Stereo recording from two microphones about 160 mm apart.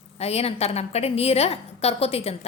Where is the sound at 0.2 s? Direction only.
40° left (ahead or behind).